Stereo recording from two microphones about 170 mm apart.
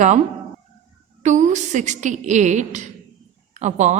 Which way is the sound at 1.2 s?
45° right (ahead or behind).